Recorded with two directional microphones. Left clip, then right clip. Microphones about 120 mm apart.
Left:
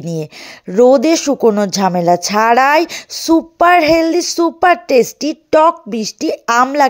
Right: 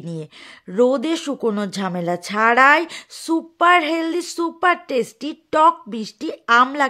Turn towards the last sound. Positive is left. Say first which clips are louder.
# left 3 dB
turn(degrees=35)  # may be behind; listen again after turning